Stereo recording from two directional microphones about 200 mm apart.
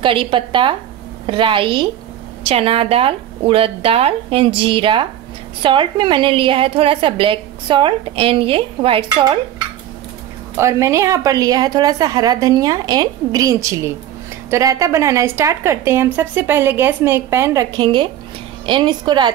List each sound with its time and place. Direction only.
0.0 s a woman's voice: 25° right (ahead or behind)
10.5 s a woman's voice: 15° right (ahead or behind)